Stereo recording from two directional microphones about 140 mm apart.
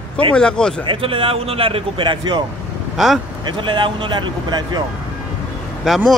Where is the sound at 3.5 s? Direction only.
35° right (ahead or behind).